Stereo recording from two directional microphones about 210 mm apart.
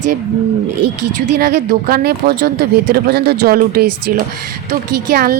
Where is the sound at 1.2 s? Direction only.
50° right (ahead or behind).